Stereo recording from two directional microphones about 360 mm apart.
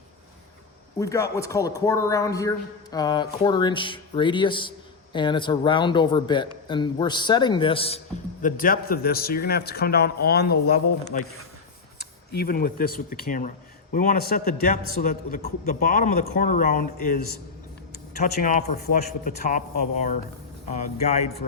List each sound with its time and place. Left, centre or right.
0.9 s speech: centre; by 11.2 s left
12.3 s speech: left